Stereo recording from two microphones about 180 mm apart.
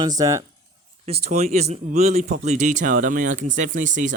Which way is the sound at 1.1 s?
35° right (ahead or behind).